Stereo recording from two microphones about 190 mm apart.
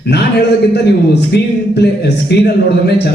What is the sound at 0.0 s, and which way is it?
Speech, 60° left (ahead or behind).